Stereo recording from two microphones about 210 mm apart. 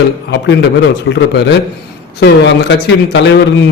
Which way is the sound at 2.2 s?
55° left (ahead or behind).